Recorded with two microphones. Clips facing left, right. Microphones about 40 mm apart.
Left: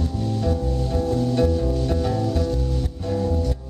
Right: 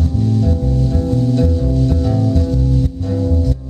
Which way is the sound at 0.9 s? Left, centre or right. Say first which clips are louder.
Right 3 dB; centre.